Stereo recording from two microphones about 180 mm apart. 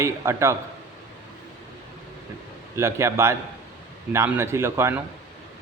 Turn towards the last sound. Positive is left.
turn(degrees=-15)  # may be behind; listen again after turning